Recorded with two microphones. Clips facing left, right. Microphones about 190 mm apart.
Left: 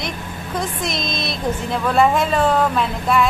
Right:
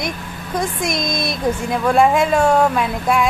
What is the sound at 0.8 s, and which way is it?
Speech, 50° right (ahead or behind).